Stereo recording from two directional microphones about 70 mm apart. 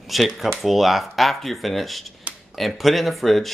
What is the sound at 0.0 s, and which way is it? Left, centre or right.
Speech, centre.